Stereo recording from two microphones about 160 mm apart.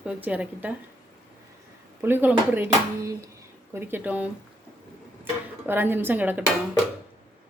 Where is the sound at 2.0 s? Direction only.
10° right (ahead or behind).